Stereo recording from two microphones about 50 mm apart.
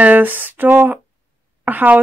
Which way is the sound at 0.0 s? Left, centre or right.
Right.